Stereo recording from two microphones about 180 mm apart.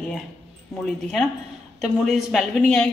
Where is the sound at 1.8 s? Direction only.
Centre (ahead or behind).